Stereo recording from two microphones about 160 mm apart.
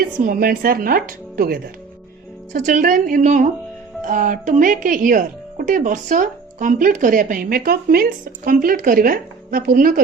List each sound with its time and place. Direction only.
0.2 s speech: 65° right (ahead or behind)
2.5 s speech: 55° right (ahead or behind)